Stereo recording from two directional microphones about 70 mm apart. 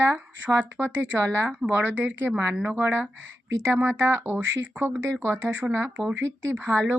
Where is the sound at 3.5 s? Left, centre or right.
Right.